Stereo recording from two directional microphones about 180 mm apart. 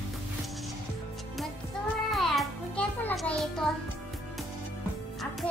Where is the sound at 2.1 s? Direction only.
Centre (ahead or behind).